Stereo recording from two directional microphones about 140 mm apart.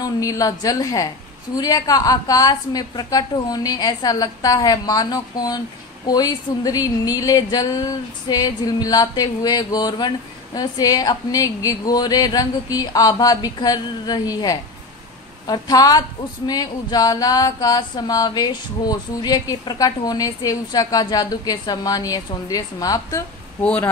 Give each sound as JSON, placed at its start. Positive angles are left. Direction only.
{"t": 0.0, "sound": "speech", "side_deg": 25}
{"t": 23.6, "sound": "speech", "side_deg": 10}